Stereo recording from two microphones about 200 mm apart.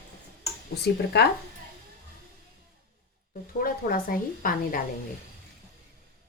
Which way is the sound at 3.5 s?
45° left (ahead or behind).